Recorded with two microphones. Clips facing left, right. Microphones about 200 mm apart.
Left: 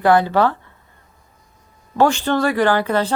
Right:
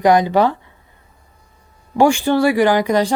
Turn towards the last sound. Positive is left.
turn(degrees=-15)  # may be behind; listen again after turning